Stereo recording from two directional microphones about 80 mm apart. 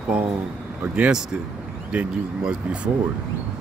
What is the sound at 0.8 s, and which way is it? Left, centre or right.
Speech, centre.